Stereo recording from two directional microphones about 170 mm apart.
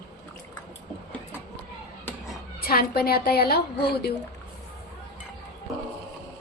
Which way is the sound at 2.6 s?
65° left (ahead or behind).